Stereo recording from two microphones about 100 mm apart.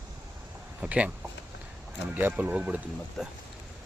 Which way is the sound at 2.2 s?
20° right (ahead or behind).